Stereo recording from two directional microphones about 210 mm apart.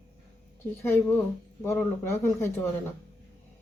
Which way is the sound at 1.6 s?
10° left (ahead or behind).